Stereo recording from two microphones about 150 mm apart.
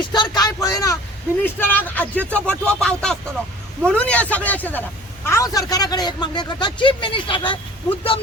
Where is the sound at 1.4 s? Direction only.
15° left (ahead or behind).